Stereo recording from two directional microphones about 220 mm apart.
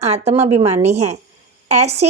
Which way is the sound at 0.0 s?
30° right (ahead or behind).